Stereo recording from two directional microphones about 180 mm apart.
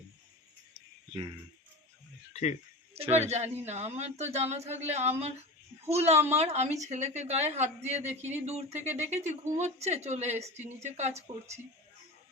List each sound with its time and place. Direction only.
2.3 s speech: 40° left (ahead or behind)
2.9 s a woman's voice: 35° right (ahead or behind)